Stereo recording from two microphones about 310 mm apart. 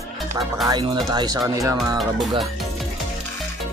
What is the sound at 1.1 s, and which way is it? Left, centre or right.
Speech, centre.